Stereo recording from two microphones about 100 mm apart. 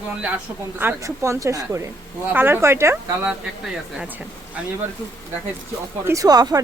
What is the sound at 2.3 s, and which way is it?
Speech, 20° right (ahead or behind).